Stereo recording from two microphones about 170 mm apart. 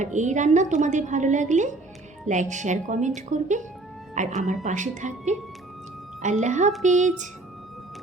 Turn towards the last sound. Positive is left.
turn(degrees=-45)  # may be behind; listen again after turning